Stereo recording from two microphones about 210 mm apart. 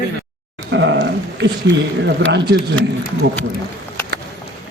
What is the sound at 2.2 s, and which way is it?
Speech, 55° right (ahead or behind).